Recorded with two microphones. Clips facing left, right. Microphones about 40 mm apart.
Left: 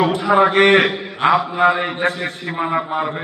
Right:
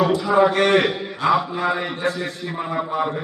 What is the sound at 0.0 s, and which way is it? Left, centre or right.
A man's voice, left.